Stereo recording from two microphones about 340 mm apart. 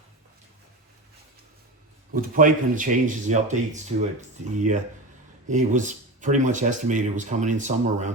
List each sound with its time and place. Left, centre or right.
2.1 s speech: right